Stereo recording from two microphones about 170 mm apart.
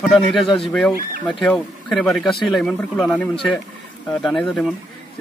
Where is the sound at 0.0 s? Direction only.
Centre (ahead or behind).